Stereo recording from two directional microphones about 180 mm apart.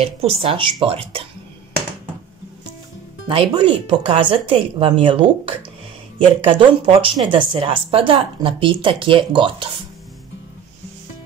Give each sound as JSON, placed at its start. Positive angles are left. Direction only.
{"t": 0.0, "sound": "speech", "side_deg": -30}
{"t": 3.3, "sound": "speech", "side_deg": -30}